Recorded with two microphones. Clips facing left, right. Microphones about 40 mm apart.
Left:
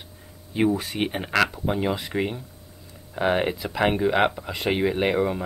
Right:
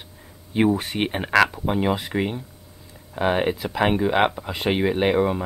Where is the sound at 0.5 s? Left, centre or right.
Right.